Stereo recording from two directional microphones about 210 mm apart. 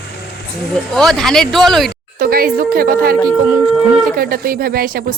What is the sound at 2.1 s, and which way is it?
Speech, 45° right (ahead or behind).